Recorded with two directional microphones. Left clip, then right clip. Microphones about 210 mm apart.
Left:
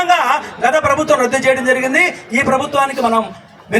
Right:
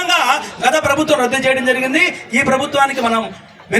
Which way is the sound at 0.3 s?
25° right (ahead or behind).